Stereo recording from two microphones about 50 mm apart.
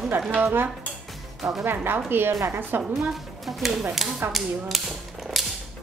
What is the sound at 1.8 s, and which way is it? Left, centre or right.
Speech, right.